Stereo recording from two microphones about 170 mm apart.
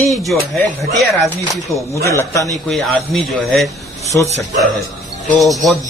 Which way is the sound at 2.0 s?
20° left (ahead or behind).